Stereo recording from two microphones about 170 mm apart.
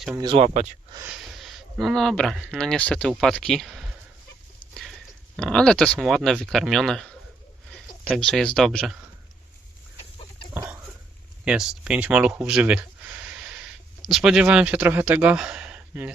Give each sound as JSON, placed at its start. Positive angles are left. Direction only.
{"t": 0.2, "sound": "speech", "side_deg": -25}
{"t": 0.4, "sound": "speech", "side_deg": -45}
{"t": 1.0, "sound": "speech", "side_deg": -5}
{"t": 4.7, "sound": "a sound", "side_deg": 0}
{"t": 5.4, "sound": "speech", "side_deg": 5}
{"t": 10.0, "sound": "chicken", "side_deg": 30}
{"t": 10.5, "sound": "chicken", "side_deg": -15}
{"t": 11.4, "sound": "speech", "side_deg": -5}
{"t": 14.1, "sound": "speech", "side_deg": -5}